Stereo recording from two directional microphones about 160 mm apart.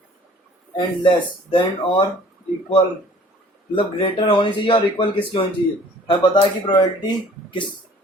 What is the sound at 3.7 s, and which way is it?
Speech, 30° left (ahead or behind).